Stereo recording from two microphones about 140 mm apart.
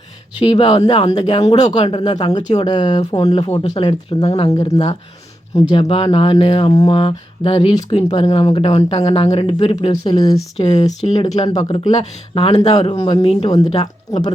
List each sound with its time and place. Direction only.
0.3 s speech: 35° left (ahead or behind)
1.8 s speech: 35° left (ahead or behind)
5.7 s speech: 40° left (ahead or behind)
7.7 s speech: 30° left (ahead or behind)
10.6 s speech: 45° left (ahead or behind)